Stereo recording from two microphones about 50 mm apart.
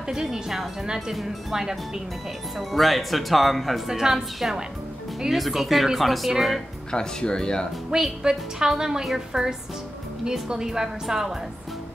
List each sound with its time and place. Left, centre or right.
0.1 s a woman's voice: centre
3.9 s a woman's voice: centre
6.9 s speech: centre
7.9 s a woman's voice: centre